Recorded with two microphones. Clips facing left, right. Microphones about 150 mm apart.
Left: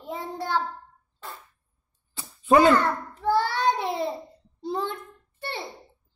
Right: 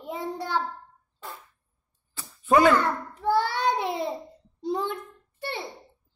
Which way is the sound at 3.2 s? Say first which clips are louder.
Left 1 dB; 15° right (ahead or behind).